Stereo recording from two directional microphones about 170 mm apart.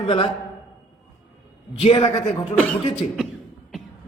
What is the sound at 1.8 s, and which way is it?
Speech, 35° left (ahead or behind).